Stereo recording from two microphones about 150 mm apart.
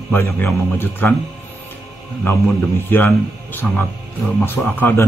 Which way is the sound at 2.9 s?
15° left (ahead or behind).